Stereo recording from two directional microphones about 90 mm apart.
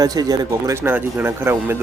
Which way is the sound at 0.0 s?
45° right (ahead or behind).